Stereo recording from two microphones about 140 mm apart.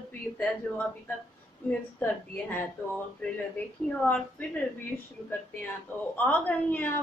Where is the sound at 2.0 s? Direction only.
15° left (ahead or behind).